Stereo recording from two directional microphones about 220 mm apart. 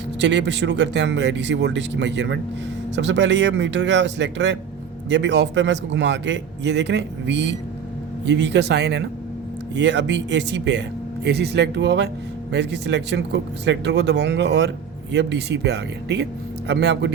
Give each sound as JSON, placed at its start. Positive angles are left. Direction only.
{"t": 0.2, "sound": "speech", "side_deg": -55}